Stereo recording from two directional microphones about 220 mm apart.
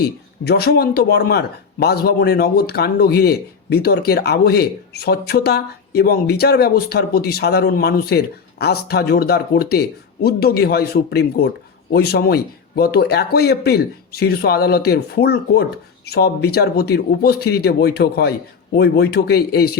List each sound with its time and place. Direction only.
0.4 s speech: 45° left (ahead or behind)